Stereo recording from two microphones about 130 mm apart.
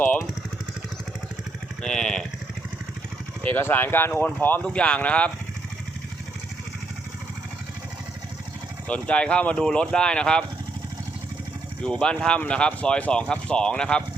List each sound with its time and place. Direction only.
1.8 s speech: 5° left (ahead or behind)
3.4 s speech: 15° left (ahead or behind)
8.9 s speech: 10° left (ahead or behind)
11.8 s speech: 5° left (ahead or behind)